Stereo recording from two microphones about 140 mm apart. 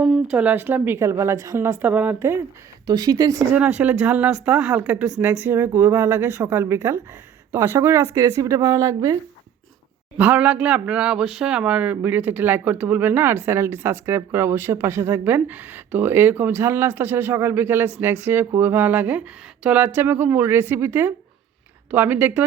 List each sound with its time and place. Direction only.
0.0 s speech: 5° right (ahead or behind)
2.8 s speech: 30° right (ahead or behind)
3.5 s speech: 10° right (ahead or behind)
10.2 s speech: 10° right (ahead or behind)